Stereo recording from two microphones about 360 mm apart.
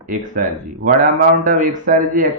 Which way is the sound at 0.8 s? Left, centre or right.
Right.